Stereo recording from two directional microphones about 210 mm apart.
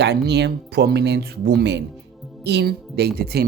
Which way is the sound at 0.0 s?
50° right (ahead or behind).